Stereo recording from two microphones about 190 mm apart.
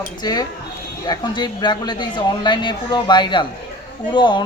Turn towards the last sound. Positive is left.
turn(degrees=25)  # may be behind; listen again after turning